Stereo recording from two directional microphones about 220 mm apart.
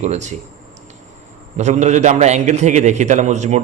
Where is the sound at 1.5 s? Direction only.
30° right (ahead or behind).